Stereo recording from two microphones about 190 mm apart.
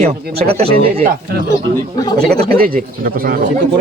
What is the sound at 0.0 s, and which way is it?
Speech, 30° right (ahead or behind).